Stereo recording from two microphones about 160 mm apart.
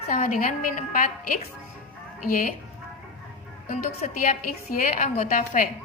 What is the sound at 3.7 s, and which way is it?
A woman's voice, 55° left (ahead or behind).